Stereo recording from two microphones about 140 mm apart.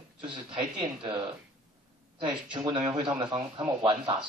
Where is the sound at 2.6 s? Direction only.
35° right (ahead or behind).